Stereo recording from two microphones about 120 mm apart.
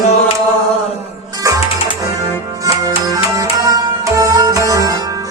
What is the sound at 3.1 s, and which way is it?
Music, 30° right (ahead or behind).